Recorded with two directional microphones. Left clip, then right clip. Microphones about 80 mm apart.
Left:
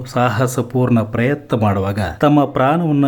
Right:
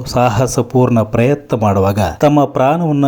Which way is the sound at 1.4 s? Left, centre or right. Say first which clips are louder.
Right 5 dB; centre.